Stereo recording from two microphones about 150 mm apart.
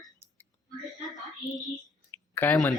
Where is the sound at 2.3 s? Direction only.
10° left (ahead or behind).